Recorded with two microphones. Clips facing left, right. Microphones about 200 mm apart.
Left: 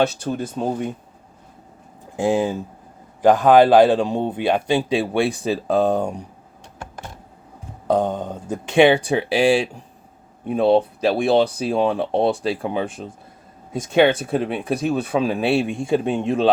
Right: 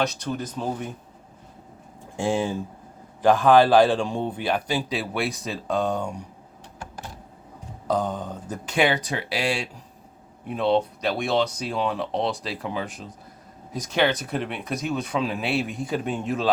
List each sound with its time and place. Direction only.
0.0 s a man's voice: 30° left (ahead or behind)
2.1 s a man's voice: 20° left (ahead or behind)
5.9 s speech: 60° left (ahead or behind)
7.9 s a man's voice: 25° left (ahead or behind)
12.1 s speech: 55° left (ahead or behind)
12.5 s a man's voice: 30° left (ahead or behind)